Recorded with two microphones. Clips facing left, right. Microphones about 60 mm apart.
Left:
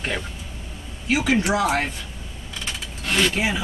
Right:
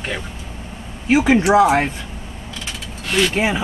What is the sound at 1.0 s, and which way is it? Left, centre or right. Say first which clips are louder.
Speech: right 6 dB; right.